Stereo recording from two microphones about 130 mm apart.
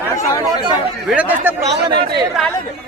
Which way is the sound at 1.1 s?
10° right (ahead or behind).